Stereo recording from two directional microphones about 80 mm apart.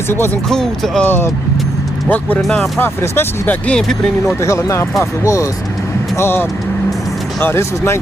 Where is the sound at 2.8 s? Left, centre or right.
Left.